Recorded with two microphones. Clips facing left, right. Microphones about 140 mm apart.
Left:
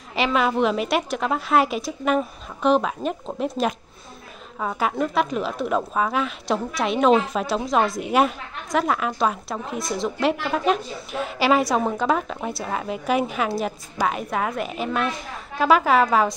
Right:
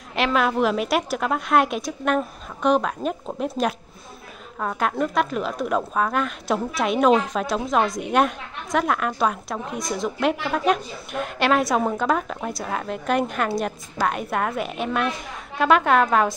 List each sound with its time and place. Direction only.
0.1 s a woman's voice: centre (ahead or behind)